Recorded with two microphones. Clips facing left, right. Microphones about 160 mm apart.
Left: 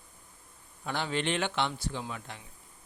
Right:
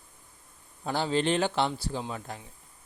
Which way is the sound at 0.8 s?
35° right (ahead or behind).